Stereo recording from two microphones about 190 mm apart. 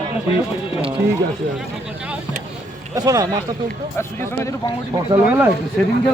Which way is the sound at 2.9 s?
20° right (ahead or behind).